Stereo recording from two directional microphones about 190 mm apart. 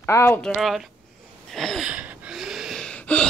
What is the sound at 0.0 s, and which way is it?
Speech, 15° left (ahead or behind).